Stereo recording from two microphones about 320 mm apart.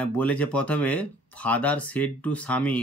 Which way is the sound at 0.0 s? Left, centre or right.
Centre.